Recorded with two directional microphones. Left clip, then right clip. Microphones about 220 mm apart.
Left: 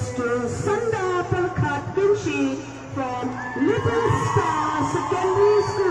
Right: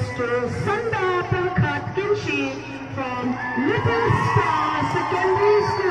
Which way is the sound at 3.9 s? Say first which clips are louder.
Right 1 dB; 45° left (ahead or behind).